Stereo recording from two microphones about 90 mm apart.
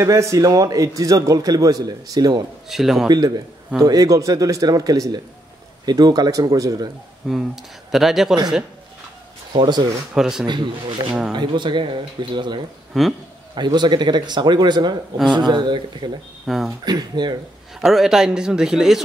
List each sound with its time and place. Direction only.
0.0 s a man's voice: 35° right (ahead or behind)
2.7 s a man's voice: 5° right (ahead or behind)
3.1 s a man's voice: 50° right (ahead or behind)
7.2 s a man's voice: 5° right (ahead or behind)
9.5 s speech: 55° right (ahead or behind)
10.1 s a man's voice: 5° right (ahead or behind)
10.4 s speech: 55° right (ahead or behind)
11.1 s speech: 10° right (ahead or behind)
11.3 s speech: 60° right (ahead or behind)
12.9 s a man's voice: centre (ahead or behind)
13.6 s speech: 55° right (ahead or behind)
16.4 s a man's voice: 5° right (ahead or behind)
16.8 s speech: 55° right (ahead or behind)
17.7 s a man's voice: 5° right (ahead or behind)